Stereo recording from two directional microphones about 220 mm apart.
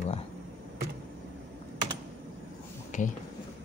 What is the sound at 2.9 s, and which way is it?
Speech, 35° left (ahead or behind).